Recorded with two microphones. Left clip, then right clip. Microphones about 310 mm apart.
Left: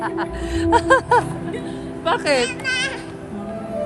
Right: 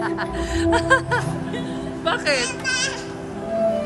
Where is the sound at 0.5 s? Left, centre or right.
Centre.